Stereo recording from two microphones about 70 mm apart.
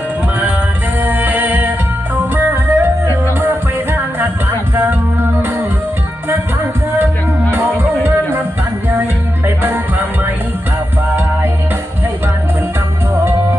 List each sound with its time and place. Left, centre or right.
1.0 s music: right
4.7 s music: right
7.5 s music: right